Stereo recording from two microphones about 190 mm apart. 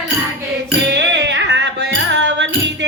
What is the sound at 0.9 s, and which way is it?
Music, 65° right (ahead or behind).